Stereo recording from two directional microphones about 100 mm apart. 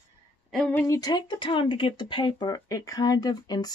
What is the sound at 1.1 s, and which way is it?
Speech, 50° left (ahead or behind).